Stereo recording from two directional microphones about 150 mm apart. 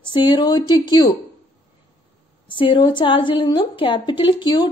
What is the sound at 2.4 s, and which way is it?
A woman's voice, 35° left (ahead or behind).